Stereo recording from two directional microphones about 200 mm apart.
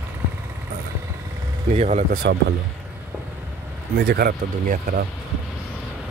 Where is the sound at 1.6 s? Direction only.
35° right (ahead or behind); by 2.6 s 50° right (ahead or behind).